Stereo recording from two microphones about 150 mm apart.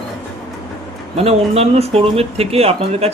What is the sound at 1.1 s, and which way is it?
Speech, 40° right (ahead or behind).